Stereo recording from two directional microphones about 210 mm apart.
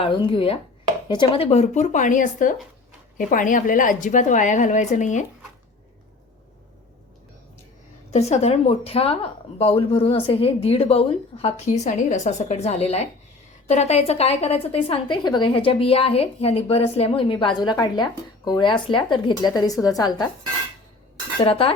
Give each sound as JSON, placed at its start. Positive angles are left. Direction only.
{"t": 0.0, "sound": "a woman's voice", "side_deg": 25}
{"t": 8.1, "sound": "speech", "side_deg": 30}
{"t": 21.4, "sound": "speech", "side_deg": 25}